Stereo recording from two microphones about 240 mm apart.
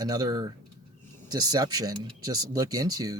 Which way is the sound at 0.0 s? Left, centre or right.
Centre.